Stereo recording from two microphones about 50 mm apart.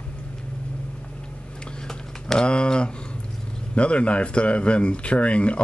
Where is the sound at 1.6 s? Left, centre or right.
Centre.